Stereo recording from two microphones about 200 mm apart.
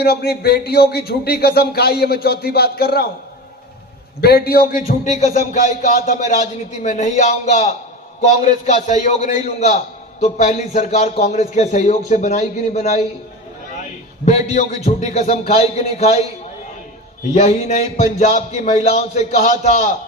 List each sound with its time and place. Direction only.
0.0 s speech: 50° left (ahead or behind)
4.2 s speech: 50° left (ahead or behind)
5.2 s a man's voice: 35° left (ahead or behind)
14.3 s a man's voice: 35° left (ahead or behind)
17.3 s a man's voice: 35° left (ahead or behind)